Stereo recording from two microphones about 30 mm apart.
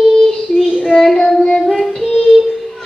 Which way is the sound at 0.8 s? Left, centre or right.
Centre.